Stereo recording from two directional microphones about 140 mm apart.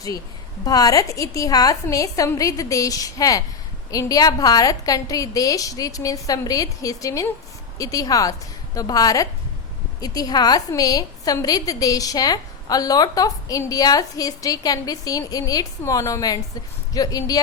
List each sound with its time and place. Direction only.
0.6 s a woman's voice: 25° left (ahead or behind)